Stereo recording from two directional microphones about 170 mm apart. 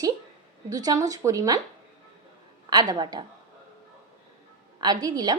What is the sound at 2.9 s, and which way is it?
Speech, 25° right (ahead or behind).